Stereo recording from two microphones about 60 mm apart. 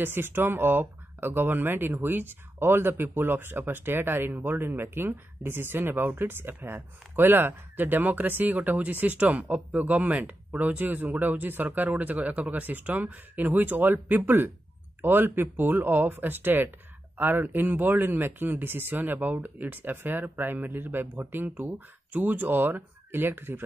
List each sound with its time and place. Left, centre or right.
0.0 s speech: right